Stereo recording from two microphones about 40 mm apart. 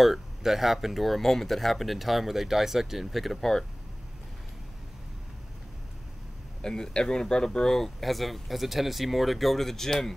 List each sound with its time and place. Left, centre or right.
0.0 s speech: centre
6.6 s speech: centre